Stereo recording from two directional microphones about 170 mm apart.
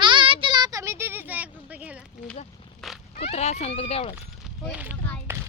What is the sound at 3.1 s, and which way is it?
Speech, 40° left (ahead or behind).